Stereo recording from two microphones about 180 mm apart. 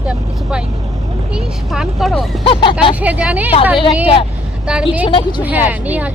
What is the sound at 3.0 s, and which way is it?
Speech, 5° right (ahead or behind).